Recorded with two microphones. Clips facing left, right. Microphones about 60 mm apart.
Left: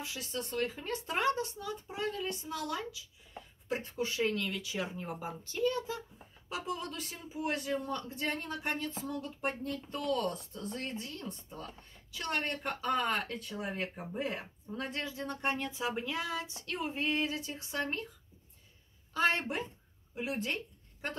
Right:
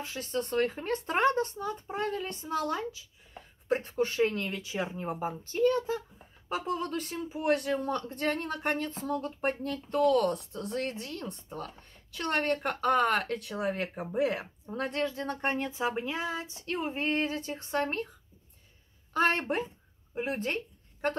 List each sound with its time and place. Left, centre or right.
0.0 s speech: right
3.6 s a man's voice: right
14.4 s speech: right
15.4 s speech: right
19.1 s speech: right